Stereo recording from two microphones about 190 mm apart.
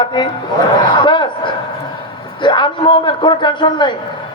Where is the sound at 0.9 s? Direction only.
25° left (ahead or behind).